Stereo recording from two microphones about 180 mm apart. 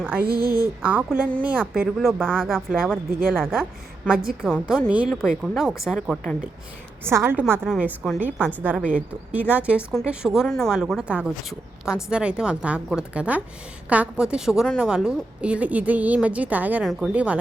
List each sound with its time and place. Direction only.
0.3 s speech: 55° right (ahead or behind)
0.8 s a woman's voice: 5° right (ahead or behind)
7.0 s a woman's voice: 15° right (ahead or behind)